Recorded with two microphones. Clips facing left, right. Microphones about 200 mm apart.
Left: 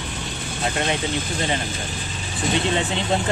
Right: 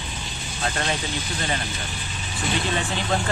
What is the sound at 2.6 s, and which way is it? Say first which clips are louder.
Speech: left 3 dB; 25° left (ahead or behind).